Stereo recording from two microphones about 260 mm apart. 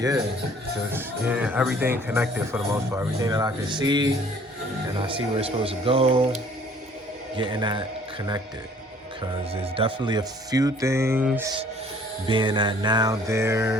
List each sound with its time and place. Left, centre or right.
0.9 s speech: centre; by 6.2 s right
7.3 s a man's voice: centre
9.5 s speech: right